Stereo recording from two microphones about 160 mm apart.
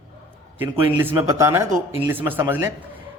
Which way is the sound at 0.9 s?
15° right (ahead or behind).